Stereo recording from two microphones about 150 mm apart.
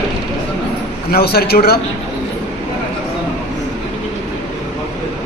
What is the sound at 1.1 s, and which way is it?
Speech, 90° left.